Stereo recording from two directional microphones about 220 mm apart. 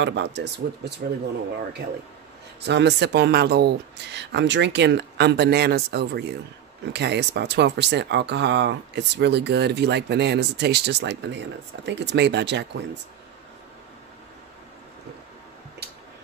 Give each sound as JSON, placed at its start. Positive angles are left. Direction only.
{"t": 0.0, "sound": "speech", "side_deg": -55}
{"t": 2.6, "sound": "speech", "side_deg": -50}